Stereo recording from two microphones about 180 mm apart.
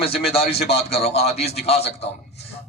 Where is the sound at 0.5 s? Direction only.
65° left (ahead or behind).